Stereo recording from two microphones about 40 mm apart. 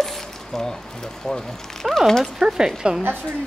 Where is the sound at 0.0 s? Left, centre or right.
Centre.